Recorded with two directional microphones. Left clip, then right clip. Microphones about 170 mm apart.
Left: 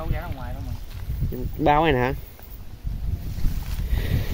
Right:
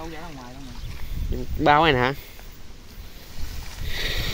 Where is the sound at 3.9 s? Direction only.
15° left (ahead or behind).